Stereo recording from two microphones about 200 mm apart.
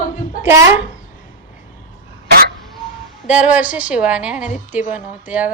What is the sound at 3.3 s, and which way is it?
A woman's voice, 5° right (ahead or behind).